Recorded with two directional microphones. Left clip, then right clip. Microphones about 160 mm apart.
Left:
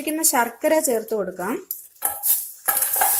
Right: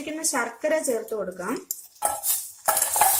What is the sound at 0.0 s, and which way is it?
A woman's voice, 45° left (ahead or behind).